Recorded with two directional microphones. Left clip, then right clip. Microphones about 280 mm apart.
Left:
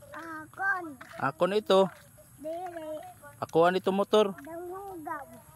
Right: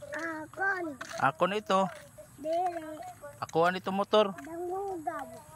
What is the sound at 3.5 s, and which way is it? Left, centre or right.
Speech, left.